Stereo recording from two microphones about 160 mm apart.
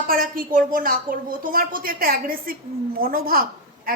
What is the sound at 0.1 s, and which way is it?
A woman's voice, 65° right (ahead or behind).